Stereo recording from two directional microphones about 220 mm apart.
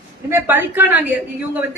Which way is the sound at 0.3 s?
10° right (ahead or behind).